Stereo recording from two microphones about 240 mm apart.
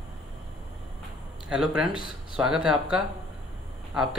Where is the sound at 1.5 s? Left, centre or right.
Centre.